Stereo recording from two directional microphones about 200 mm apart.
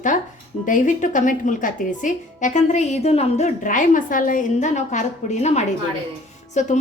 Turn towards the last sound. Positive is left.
turn(degrees=35)  # may be behind; listen again after turning